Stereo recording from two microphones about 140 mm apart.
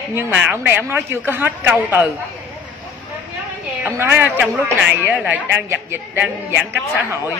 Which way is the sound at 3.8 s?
15° right (ahead or behind).